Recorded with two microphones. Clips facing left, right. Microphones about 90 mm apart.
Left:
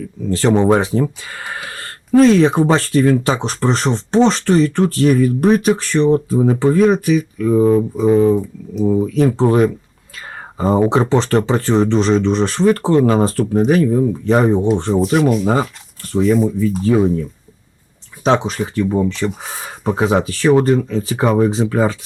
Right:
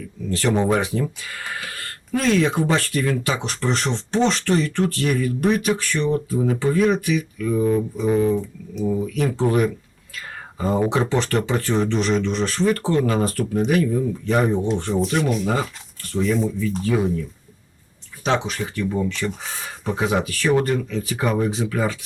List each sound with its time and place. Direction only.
0.3 s speech: 30° left (ahead or behind)
15.2 s speech: centre (ahead or behind)
16.1 s speech: 35° left (ahead or behind)
18.4 s speech: 30° left (ahead or behind)